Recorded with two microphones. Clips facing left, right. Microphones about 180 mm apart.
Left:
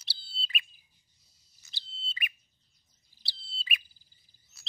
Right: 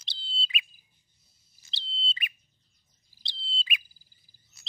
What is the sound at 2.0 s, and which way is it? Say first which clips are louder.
Bird: right 2 dB; 25° right (ahead or behind).